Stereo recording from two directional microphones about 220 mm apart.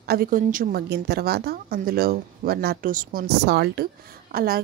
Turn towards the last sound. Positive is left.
turn(degrees=-45)  # may be behind; listen again after turning